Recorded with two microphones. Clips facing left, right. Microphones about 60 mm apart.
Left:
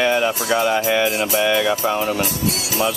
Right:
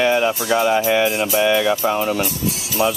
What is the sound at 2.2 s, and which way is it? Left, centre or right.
Music, left.